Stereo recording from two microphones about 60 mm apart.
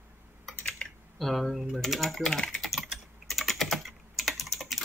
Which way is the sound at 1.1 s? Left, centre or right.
Centre.